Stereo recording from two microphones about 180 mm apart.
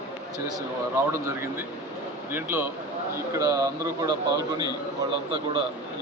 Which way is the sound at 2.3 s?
10° right (ahead or behind).